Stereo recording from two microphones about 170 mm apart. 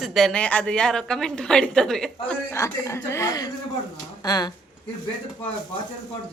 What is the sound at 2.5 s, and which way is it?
Speech, 15° left (ahead or behind).